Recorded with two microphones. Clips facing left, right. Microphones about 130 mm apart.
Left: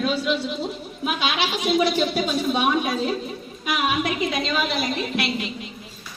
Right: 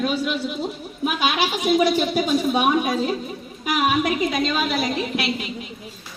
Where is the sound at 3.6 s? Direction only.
45° right (ahead or behind).